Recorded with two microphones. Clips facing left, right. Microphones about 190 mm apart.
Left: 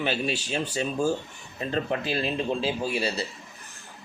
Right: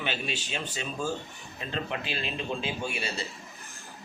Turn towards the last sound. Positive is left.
turn(degrees=35)  # may be behind; listen again after turning